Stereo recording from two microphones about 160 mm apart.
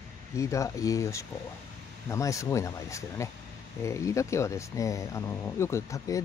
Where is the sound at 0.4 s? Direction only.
20° left (ahead or behind).